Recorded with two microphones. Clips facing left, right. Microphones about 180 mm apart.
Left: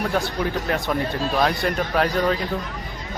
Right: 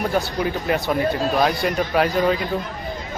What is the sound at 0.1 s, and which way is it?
Speech, 5° right (ahead or behind).